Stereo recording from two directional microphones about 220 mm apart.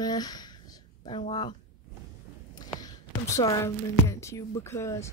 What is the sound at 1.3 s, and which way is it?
Speech, 20° left (ahead or behind).